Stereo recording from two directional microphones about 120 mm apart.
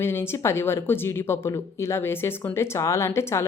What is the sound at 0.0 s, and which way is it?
Speech, 20° left (ahead or behind).